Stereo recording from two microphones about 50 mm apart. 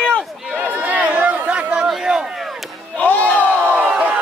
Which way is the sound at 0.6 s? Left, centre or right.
Right.